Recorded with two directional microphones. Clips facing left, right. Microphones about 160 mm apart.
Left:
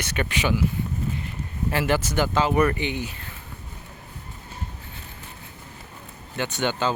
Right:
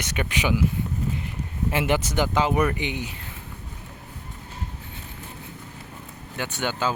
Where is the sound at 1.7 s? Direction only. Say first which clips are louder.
Even; 20° right (ahead or behind).